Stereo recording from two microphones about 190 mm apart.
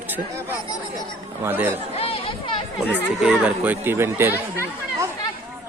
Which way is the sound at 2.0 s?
30° left (ahead or behind).